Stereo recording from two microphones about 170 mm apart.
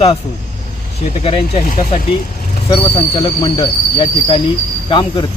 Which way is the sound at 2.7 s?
25° left (ahead or behind).